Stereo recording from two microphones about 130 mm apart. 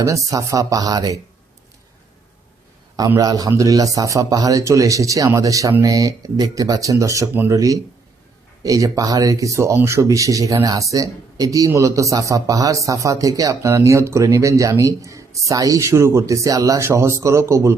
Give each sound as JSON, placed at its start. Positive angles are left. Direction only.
{"t": 0.0, "sound": "speech", "side_deg": -25}
{"t": 3.2, "sound": "speech", "side_deg": -30}